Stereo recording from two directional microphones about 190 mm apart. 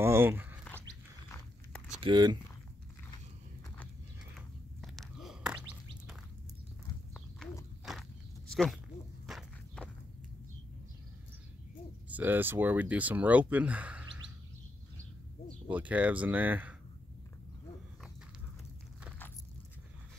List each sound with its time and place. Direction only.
0.0 s speech: 10° right (ahead or behind)
2.0 s speech: 25° right (ahead or behind)
4.4 s a sound: centre (ahead or behind)
7.9 s walk: centre (ahead or behind)
8.5 s a sound: 5° left (ahead or behind)
9.2 s walk: centre (ahead or behind)
12.1 s speech: 10° right (ahead or behind)
15.7 s speech: 10° right (ahead or behind)